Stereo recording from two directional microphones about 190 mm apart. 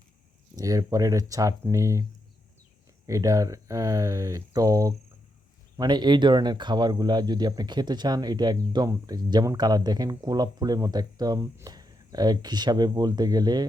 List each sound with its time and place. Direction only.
0.5 s speech: 20° right (ahead or behind)
3.1 s speech: 15° right (ahead or behind)